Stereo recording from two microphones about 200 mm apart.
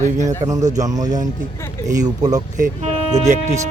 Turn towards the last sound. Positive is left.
turn(degrees=-35)  # may be behind; listen again after turning